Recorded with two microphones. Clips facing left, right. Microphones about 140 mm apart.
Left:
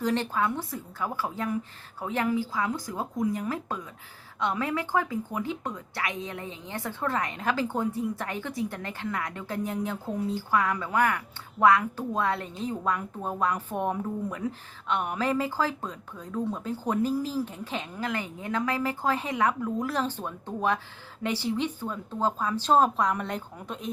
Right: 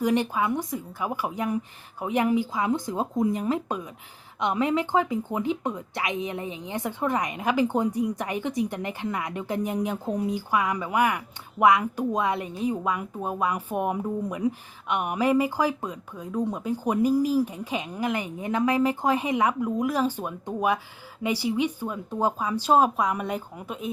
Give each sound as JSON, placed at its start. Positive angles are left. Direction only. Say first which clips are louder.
{"t": 0.0, "sound": "a woman's voice", "louder": "right 3 dB", "side_deg": -15}